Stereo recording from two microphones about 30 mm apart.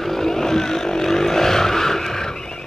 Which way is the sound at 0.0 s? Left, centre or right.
Centre.